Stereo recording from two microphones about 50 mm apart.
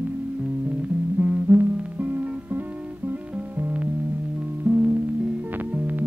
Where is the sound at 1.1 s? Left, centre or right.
Right.